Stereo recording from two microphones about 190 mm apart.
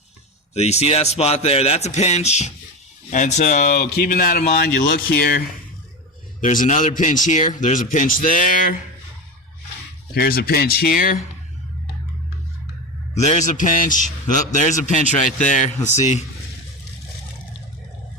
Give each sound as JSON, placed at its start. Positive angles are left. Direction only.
{"t": 0.5, "sound": "speech", "side_deg": 35}
{"t": 6.4, "sound": "speech", "side_deg": 40}
{"t": 10.2, "sound": "speech", "side_deg": 50}
{"t": 13.1, "sound": "speech", "side_deg": 35}